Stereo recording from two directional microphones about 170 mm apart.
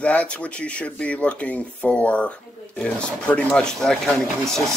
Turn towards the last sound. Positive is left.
turn(degrees=0)  # may be behind; listen again after turning